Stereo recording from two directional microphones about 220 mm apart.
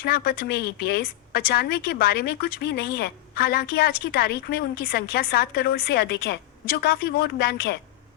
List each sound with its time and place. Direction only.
0.0 s a woman's voice: 45° left (ahead or behind)